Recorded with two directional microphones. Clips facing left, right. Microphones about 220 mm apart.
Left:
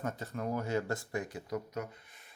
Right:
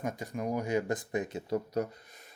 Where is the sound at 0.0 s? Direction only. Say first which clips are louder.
Right 2 dB; 15° right (ahead or behind).